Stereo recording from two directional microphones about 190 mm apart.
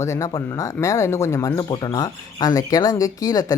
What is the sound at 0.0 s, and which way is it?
Speech, 15° left (ahead or behind).